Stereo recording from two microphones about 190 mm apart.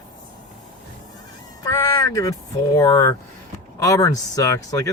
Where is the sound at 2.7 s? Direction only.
15° left (ahead or behind).